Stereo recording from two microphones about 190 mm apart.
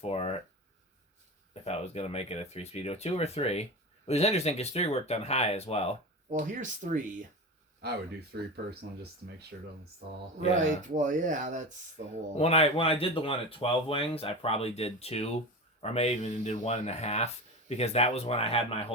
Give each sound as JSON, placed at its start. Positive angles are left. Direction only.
{"t": 0.0, "sound": "speech", "side_deg": 30}
{"t": 1.6, "sound": "speech", "side_deg": 35}
{"t": 6.3, "sound": "speech", "side_deg": -40}
{"t": 7.8, "sound": "speech", "side_deg": -55}
{"t": 10.8, "sound": "speech", "side_deg": -45}
{"t": 12.4, "sound": "speech", "side_deg": 30}